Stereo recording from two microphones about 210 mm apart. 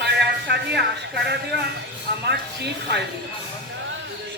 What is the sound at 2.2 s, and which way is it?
Speech, 55° right (ahead or behind).